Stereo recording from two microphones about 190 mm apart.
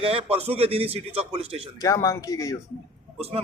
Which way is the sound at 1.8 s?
15° left (ahead or behind).